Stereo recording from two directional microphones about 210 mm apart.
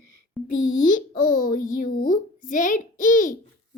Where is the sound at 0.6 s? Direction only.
40° left (ahead or behind).